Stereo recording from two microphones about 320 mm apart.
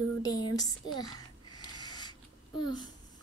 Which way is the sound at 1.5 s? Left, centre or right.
Centre.